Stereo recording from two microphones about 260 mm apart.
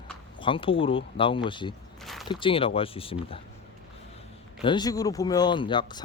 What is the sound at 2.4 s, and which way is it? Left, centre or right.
Speech, left.